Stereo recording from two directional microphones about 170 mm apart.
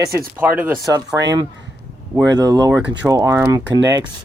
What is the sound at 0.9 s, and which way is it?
Speech, 20° right (ahead or behind).